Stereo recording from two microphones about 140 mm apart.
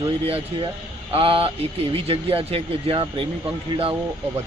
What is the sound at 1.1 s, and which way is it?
Speech, 40° right (ahead or behind).